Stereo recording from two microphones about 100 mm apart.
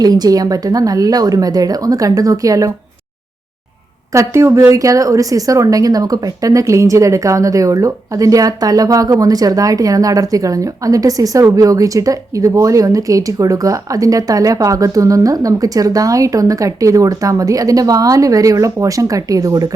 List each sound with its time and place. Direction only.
0.0 s a woman's voice: 40° right (ahead or behind)
4.1 s a woman's voice: 30° right (ahead or behind)